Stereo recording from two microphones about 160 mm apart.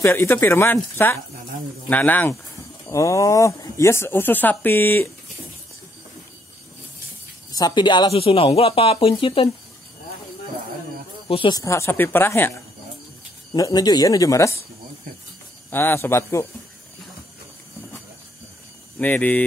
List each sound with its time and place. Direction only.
0.0 s speech: 15° left (ahead or behind)
7.5 s speech: 25° left (ahead or behind)
11.2 s speech: 35° left (ahead or behind)
11.5 s speech: 20° left (ahead or behind)
13.5 s speech: 25° left (ahead or behind)
15.7 s speech: 15° left (ahead or behind)
18.9 s speech: 10° left (ahead or behind)